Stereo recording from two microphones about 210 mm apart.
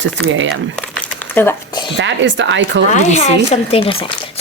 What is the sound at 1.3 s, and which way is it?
Speech, 10° left (ahead or behind).